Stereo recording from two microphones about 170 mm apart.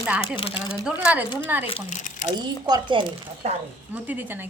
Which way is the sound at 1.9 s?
45° left (ahead or behind).